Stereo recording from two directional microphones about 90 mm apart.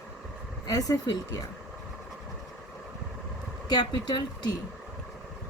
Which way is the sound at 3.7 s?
55° left (ahead or behind).